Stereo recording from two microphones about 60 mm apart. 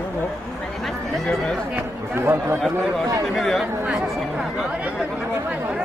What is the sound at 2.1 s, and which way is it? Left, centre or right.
Speech, right.